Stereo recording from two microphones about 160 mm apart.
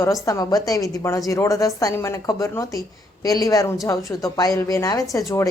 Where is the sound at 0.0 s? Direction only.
20° left (ahead or behind).